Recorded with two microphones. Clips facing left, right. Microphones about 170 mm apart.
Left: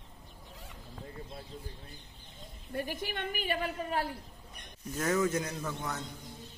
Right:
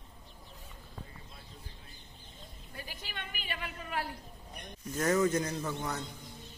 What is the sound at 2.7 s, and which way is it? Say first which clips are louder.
A woman's voice: left 12 dB; 50° left (ahead or behind).